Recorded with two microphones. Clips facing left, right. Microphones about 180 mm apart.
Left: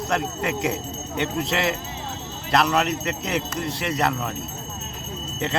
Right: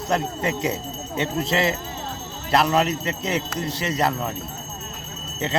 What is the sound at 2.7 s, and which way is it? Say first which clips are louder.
Speech: right 1 dB; centre (ahead or behind).